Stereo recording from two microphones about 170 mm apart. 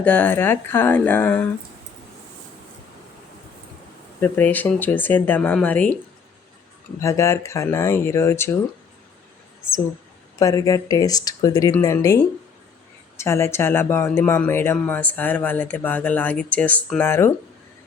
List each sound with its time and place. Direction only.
0.0 s speech: 10° left (ahead or behind)
4.2 s speech: 10° left (ahead or behind)
7.0 s speech: 20° left (ahead or behind)
10.3 s speech: 20° left (ahead or behind)